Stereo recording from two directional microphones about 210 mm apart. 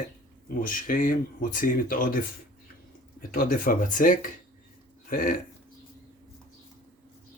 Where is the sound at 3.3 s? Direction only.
40° left (ahead or behind).